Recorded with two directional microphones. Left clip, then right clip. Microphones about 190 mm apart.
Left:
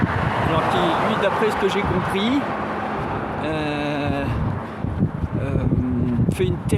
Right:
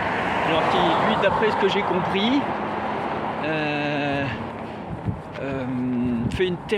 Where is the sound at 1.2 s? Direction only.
10° left (ahead or behind).